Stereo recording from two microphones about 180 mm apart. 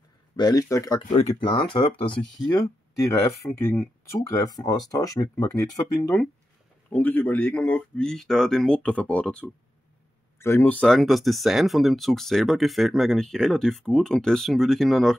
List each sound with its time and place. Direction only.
0.4 s speech: 20° left (ahead or behind)
3.4 s speech: 15° left (ahead or behind)